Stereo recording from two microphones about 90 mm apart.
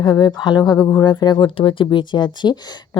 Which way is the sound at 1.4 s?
80° left.